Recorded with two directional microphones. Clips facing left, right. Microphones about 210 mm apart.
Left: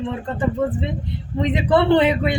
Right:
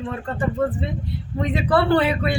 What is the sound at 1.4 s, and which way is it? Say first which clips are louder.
Speech: left 3 dB; 20° left (ahead or behind).